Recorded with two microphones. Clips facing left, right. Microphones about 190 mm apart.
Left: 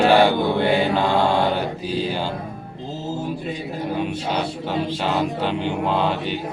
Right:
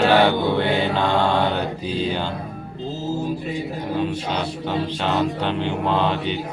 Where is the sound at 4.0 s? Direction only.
10° left (ahead or behind).